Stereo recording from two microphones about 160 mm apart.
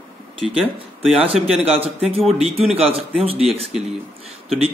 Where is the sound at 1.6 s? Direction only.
40° right (ahead or behind).